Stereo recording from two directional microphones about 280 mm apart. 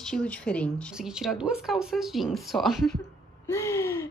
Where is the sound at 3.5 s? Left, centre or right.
Centre.